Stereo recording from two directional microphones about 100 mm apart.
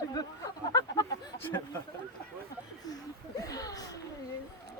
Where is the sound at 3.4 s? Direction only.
35° left (ahead or behind).